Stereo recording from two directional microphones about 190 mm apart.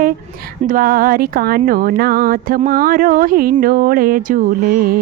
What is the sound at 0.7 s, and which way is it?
Speech, 50° right (ahead or behind).